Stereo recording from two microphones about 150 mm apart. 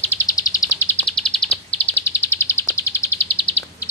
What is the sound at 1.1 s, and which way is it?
Bird, 5° left (ahead or behind).